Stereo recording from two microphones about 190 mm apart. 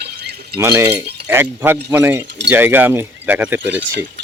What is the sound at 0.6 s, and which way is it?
Speech, 10° right (ahead or behind).